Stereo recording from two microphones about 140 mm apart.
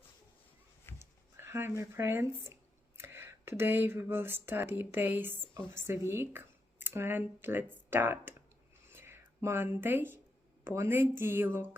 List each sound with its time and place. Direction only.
0.9 s speech: 15° right (ahead or behind)
8.9 s a sound: 15° right (ahead or behind)
10.6 s a woman's voice: 15° right (ahead or behind)